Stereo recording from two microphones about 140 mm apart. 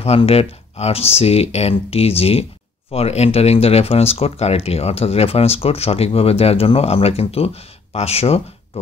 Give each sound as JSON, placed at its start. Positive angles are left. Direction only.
{"t": 0.0, "sound": "speech", "side_deg": 45}